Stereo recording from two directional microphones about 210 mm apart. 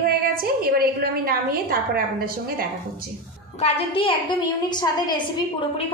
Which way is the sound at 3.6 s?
25° left (ahead or behind).